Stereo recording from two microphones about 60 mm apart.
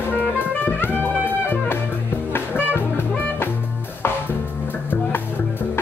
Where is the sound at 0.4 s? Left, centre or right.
Left.